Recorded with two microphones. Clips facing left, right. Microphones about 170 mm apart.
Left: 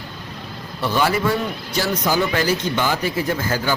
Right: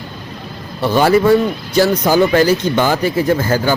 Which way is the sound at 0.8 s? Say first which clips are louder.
Right 8 dB; 35° right (ahead or behind).